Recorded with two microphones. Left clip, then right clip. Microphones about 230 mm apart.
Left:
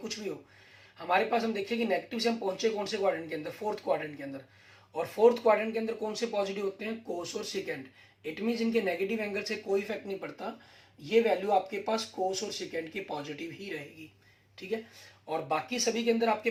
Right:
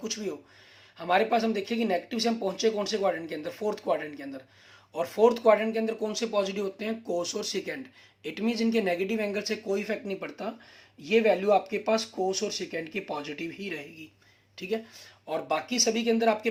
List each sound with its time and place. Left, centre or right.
0.9 s speech: right
15.3 s speech: right